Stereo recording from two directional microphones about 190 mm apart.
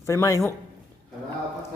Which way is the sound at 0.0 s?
15° left (ahead or behind).